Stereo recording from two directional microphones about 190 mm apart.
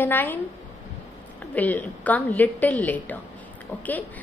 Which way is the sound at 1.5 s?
10° left (ahead or behind).